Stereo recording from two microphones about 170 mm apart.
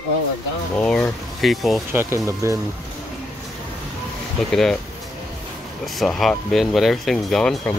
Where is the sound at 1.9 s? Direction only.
15° right (ahead or behind).